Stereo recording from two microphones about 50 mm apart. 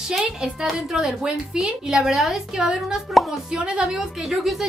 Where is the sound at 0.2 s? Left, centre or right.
Centre.